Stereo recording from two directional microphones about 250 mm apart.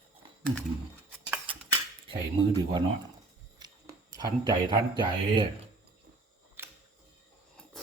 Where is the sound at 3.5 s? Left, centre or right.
Centre.